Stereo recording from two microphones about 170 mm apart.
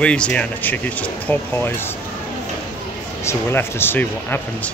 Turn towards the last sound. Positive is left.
turn(degrees=10)  # may be behind; listen again after turning